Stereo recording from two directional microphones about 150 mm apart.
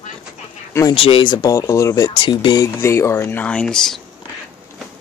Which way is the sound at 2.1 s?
30° left (ahead or behind).